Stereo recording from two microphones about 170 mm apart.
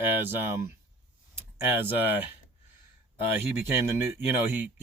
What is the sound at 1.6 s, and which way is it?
Speech, 10° right (ahead or behind).